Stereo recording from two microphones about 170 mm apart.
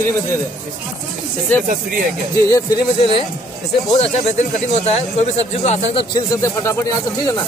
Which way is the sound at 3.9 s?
40° left (ahead or behind).